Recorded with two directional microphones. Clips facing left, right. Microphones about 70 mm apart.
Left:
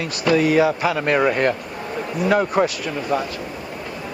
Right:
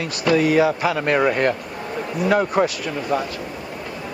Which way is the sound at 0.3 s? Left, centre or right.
Left.